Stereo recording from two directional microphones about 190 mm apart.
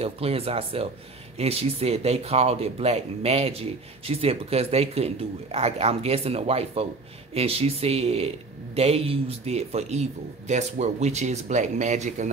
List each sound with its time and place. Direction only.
0.0 s speech: 30° right (ahead or behind)